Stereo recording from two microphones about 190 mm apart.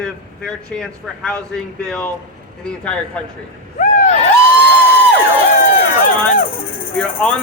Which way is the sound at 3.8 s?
40° left (ahead or behind).